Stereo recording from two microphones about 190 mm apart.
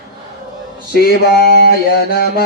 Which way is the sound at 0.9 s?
55° left (ahead or behind).